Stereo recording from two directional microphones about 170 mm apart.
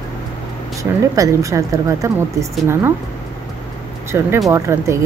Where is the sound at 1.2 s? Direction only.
20° right (ahead or behind).